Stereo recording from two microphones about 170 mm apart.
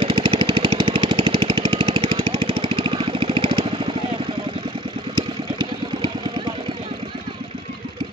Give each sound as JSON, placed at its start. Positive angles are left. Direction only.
{"t": 0.0, "sound": "jackhammer", "side_deg": -30}
{"t": 5.1, "sound": "engine", "side_deg": -30}